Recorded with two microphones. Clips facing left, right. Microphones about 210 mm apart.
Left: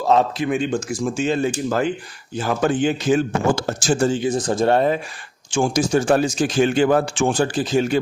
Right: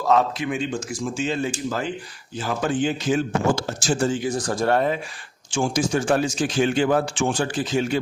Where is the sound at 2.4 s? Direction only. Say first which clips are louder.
Left 4 dB; 55° left (ahead or behind); by 4.2 s 40° left (ahead or behind).